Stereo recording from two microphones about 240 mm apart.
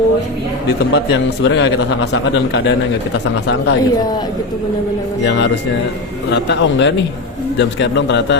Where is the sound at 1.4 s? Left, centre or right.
Left.